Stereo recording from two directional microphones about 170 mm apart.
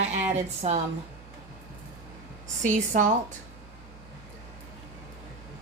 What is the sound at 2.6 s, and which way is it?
Speech, 45° right (ahead or behind).